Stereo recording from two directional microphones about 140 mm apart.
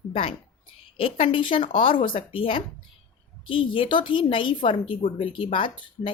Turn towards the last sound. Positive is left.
turn(degrees=40)  # may be behind; listen again after turning